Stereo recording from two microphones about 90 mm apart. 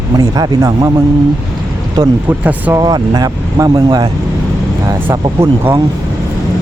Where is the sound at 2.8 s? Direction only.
50° right (ahead or behind).